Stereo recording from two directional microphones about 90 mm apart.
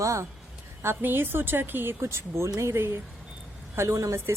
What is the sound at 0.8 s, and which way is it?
Speech, 25° right (ahead or behind).